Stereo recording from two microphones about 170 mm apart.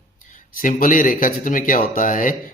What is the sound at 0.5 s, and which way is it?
Speech, 55° left (ahead or behind).